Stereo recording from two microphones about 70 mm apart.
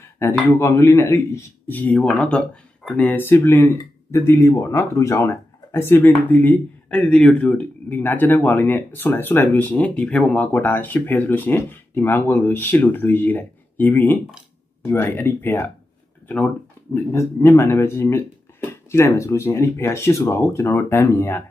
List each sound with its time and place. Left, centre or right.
0.5 s speech: left
1.7 s speech: left
3.0 s speech: left; by 7.4 s centre
7.4 s speech: left
10.6 s speech: left
16.9 s speech: left